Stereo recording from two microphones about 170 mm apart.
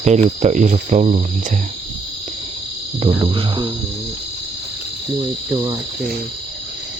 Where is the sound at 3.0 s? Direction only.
30° right (ahead or behind).